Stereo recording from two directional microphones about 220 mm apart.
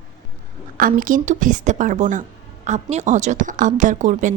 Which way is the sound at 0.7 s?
40° right (ahead or behind).